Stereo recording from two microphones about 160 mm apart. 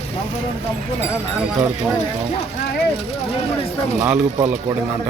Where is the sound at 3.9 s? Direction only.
10° right (ahead or behind).